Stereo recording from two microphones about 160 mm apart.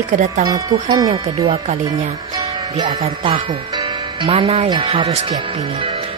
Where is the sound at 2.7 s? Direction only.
25° right (ahead or behind).